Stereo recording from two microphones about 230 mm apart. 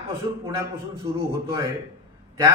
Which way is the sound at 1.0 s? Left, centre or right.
Centre.